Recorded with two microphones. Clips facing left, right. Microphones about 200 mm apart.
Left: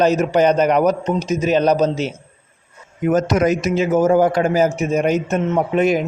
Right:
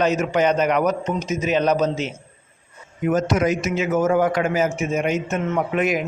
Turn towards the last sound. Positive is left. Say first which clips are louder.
# left 5 dB
turn(degrees=30)  # may be behind; listen again after turning